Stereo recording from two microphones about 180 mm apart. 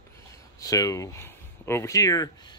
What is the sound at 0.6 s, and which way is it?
Speech, 20° left (ahead or behind).